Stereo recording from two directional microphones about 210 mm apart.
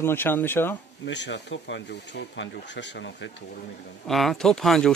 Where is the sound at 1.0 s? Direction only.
55° left (ahead or behind).